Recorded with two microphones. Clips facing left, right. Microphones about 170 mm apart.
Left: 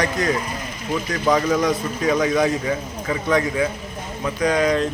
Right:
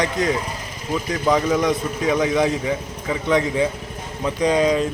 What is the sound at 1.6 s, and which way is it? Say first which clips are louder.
A man's voice: even; 20° right (ahead or behind).